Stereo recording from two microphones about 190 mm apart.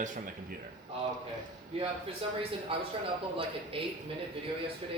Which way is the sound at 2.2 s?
30° right (ahead or behind).